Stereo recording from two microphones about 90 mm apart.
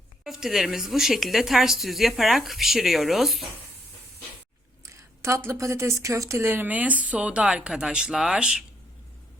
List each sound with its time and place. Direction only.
0.3 s speech: 5° right (ahead or behind)
4.8 s speech: 35° right (ahead or behind); by 8.6 s 10° right (ahead or behind)